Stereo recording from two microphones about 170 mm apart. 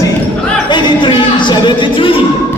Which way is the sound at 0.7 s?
25° left (ahead or behind).